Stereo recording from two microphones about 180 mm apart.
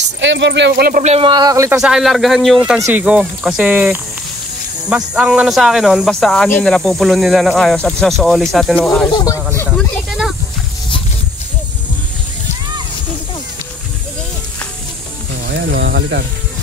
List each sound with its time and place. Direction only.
0.2 s speech: 80° right; by 1.0 s 60° right (ahead or behind)
1.0 s speech: 30° right (ahead or behind)
1.8 s speech: 5° right (ahead or behind)
9.1 s speech: 20° left (ahead or behind)
15.4 s music: 70° right (ahead or behind)